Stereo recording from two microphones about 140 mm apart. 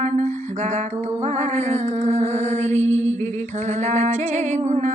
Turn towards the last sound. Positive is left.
turn(degrees=-60)  # may be behind; listen again after turning